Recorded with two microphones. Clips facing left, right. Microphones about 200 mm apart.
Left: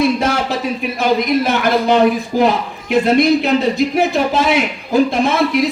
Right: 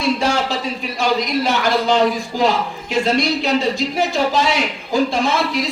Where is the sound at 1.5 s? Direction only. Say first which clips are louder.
Left 3 dB; 55° left (ahead or behind).